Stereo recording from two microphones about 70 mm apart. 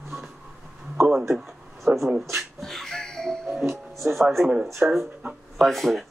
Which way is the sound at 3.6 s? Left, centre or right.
Right.